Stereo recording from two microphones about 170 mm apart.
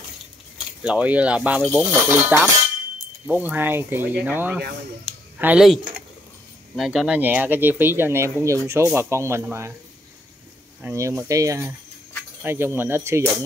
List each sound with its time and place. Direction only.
0.8 s speech: 10° right (ahead or behind)
10.8 s speech: 15° right (ahead or behind)